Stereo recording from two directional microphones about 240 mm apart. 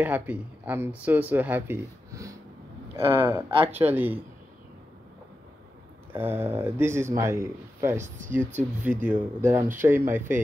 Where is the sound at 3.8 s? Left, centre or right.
Centre.